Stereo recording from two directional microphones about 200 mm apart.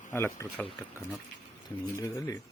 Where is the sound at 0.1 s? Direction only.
10° left (ahead or behind).